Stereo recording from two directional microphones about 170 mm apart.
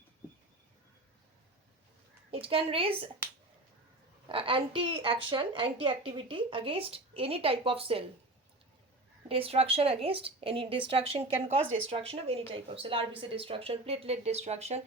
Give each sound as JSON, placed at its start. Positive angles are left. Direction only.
{"t": 2.3, "sound": "speech", "side_deg": -30}
{"t": 4.3, "sound": "speech", "side_deg": -30}
{"t": 9.3, "sound": "speech", "side_deg": -35}